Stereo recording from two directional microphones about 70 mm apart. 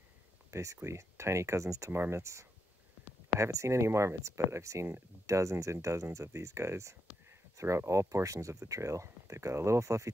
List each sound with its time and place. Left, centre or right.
0.5 s speech: right